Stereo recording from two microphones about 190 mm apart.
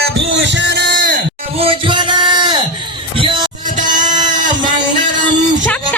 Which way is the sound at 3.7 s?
45° right (ahead or behind).